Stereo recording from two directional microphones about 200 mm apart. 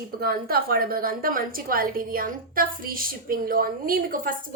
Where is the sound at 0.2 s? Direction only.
50° right (ahead or behind).